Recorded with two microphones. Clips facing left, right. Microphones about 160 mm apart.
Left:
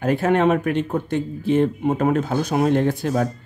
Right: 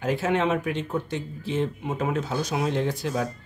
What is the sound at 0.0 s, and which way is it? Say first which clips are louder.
Speech: left 6 dB; 55° left (ahead or behind).